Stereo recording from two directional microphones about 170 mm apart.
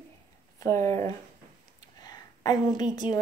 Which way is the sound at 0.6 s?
20° left (ahead or behind).